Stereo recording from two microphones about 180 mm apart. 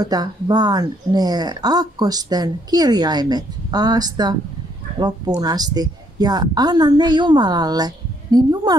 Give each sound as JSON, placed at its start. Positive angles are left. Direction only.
{"t": 0.0, "sound": "speech", "side_deg": -20}